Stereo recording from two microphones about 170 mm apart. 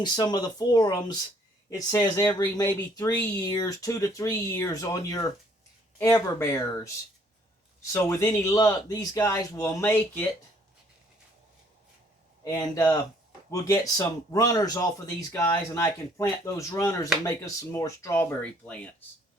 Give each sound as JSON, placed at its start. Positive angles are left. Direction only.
{"t": 0.0, "sound": "speech", "side_deg": 25}
{"t": 6.4, "sound": "speech", "side_deg": 15}
{"t": 7.9, "sound": "speech", "side_deg": 20}
{"t": 12.5, "sound": "speech", "side_deg": 15}